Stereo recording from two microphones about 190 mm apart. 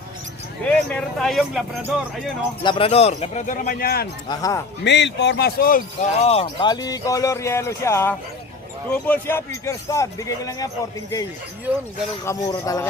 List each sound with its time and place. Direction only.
0.6 s speech: 5° left (ahead or behind)
2.6 s speech: 30° left (ahead or behind); by 4.1 s 55° left (ahead or behind)
4.3 s speech: 20° left (ahead or behind)
4.8 s speech: 65° left (ahead or behind); by 6.1 s 50° left (ahead or behind)
6.2 s speech: 30° left (ahead or behind)
12.2 s speech: 15° left (ahead or behind)